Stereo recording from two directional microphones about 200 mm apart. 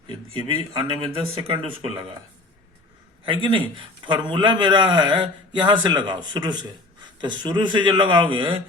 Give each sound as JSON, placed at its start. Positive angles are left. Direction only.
{"t": 0.3, "sound": "a man's voice", "side_deg": -25}
{"t": 3.2, "sound": "a man's voice", "side_deg": -25}